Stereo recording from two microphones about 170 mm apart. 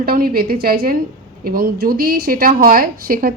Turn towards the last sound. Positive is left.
turn(degrees=-60)  # may be behind; listen again after turning